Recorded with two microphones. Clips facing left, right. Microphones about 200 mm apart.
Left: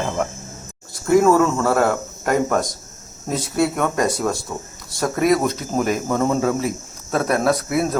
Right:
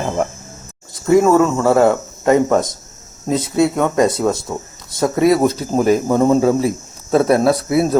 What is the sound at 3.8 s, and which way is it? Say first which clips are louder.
Speech: right 5 dB; 20° right (ahead or behind).